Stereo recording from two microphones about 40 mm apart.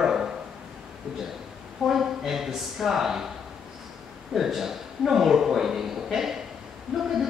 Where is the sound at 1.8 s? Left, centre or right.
Centre.